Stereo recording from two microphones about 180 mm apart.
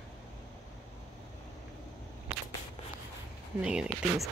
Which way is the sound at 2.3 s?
35° right (ahead or behind).